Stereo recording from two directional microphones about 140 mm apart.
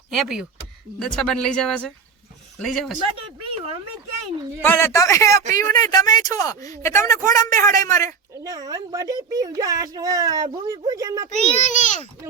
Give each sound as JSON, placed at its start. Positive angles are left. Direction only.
{"t": 0.1, "sound": "speech", "side_deg": 0}
{"t": 3.2, "sound": "a sound", "side_deg": -40}
{"t": 4.6, "sound": "speech", "side_deg": 15}
{"t": 8.4, "sound": "speech", "side_deg": -25}
{"t": 11.6, "sound": "a child's voice", "side_deg": 60}